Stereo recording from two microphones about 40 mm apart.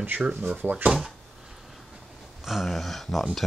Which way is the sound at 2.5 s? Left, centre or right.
Centre.